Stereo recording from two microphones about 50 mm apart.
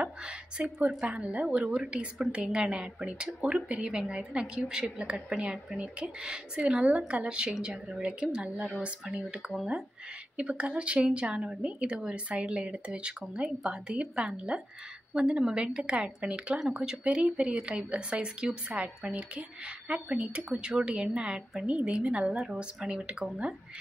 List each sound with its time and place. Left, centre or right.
0.0 s a woman's voice: centre
22.3 s a woman's voice: centre
22.8 s a woman's voice: centre